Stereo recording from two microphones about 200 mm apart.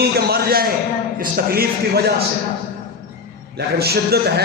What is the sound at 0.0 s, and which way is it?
Speech, 50° right (ahead or behind).